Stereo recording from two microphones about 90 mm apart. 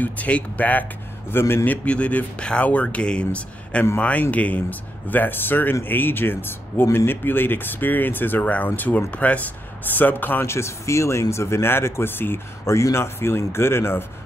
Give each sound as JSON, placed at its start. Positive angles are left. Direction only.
{"t": 0.0, "sound": "a man's voice", "side_deg": 15}